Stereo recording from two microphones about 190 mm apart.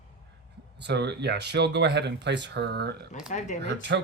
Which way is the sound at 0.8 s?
60° right (ahead or behind).